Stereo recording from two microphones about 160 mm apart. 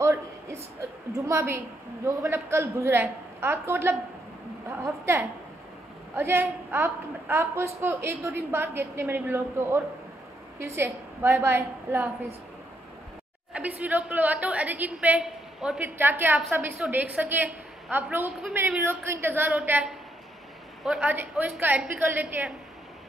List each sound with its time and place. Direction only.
0.0 s a sound: 20° right (ahead or behind)
1.1 s a woman's voice: 20° right (ahead or behind)
13.5 s a woman's voice: 10° right (ahead or behind)